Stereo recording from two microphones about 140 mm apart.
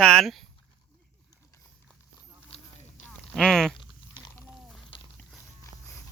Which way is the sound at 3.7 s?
30° left (ahead or behind).